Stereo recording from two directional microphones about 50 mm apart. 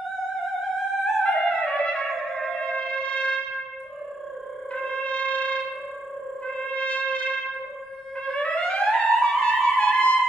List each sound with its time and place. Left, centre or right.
0.6 s music: centre
1.2 s trumpet: left
2.4 s music: left
4.7 s wind instrument: left
6.4 s brass instrument: left
8.3 s music: left